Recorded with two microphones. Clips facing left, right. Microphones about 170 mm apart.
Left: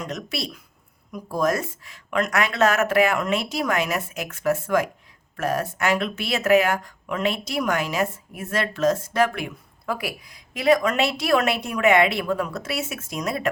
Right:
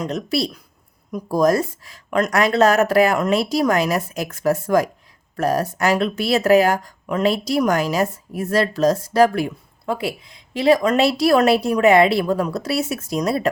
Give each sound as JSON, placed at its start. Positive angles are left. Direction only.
{"t": 0.0, "sound": "speech", "side_deg": -35}